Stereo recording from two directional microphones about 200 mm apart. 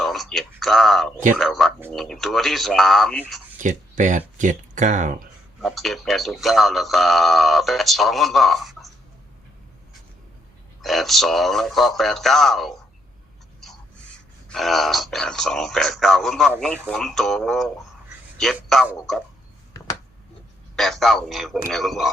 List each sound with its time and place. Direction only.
0.0 s speech: centre (ahead or behind)
3.6 s speech: 40° right (ahead or behind)
5.6 s speech: centre (ahead or behind)
10.8 s speech: centre (ahead or behind)
14.5 s speech: centre (ahead or behind)
20.7 s speech: centre (ahead or behind)